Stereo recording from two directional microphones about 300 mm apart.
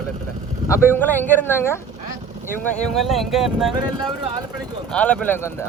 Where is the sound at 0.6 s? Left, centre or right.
Centre.